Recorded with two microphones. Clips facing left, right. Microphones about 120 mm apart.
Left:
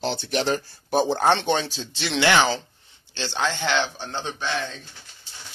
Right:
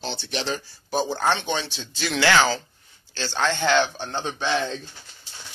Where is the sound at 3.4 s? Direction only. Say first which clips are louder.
Right 3 dB; centre (ahead or behind).